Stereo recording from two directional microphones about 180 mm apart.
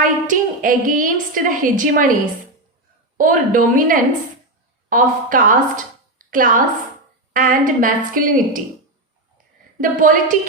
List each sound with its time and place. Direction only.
0.0 s a woman's voice: 50° right (ahead or behind)
3.2 s a woman's voice: 50° right (ahead or behind)
9.8 s a woman's voice: 45° right (ahead or behind)